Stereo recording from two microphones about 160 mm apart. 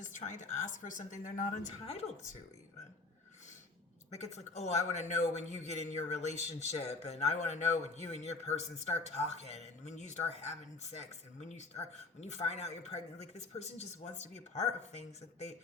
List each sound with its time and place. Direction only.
0.0 s a man's voice: 50° left (ahead or behind)
1.8 s a woman's voice: 40° left (ahead or behind)
4.1 s a man's voice: 45° left (ahead or behind)